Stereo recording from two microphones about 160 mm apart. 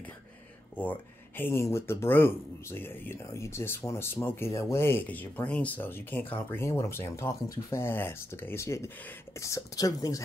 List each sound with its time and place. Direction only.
0.7 s speech: 10° left (ahead or behind)